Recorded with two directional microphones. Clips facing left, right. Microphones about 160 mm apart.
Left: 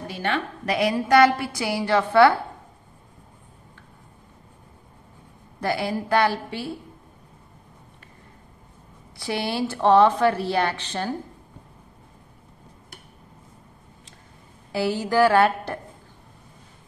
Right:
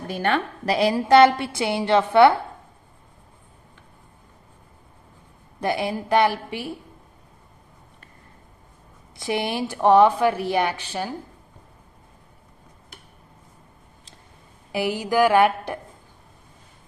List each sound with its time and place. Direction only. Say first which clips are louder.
0.1 s a woman's voice: right 4 dB; 50° right (ahead or behind)
0.7 s a woman's voice: right 3 dB; 30° right (ahead or behind)
5.6 s a woman's voice: right 1 dB; 20° right (ahead or behind)
9.1 s speech: right 2 dB; 20° right (ahead or behind)
14.7 s speech: even; 15° right (ahead or behind)